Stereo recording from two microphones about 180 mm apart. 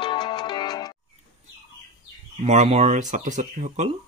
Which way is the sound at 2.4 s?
35° right (ahead or behind).